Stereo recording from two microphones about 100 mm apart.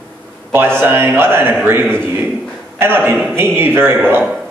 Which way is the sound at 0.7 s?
25° right (ahead or behind).